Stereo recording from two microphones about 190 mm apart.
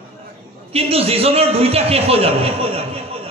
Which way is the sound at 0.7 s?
30° right (ahead or behind).